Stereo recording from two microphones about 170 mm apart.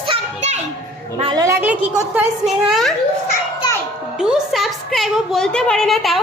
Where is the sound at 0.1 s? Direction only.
40° right (ahead or behind).